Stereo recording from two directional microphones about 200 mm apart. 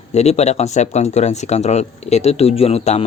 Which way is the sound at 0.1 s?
35° left (ahead or behind).